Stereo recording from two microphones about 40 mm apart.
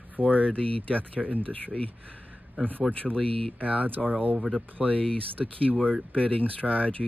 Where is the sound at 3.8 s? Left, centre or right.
Right.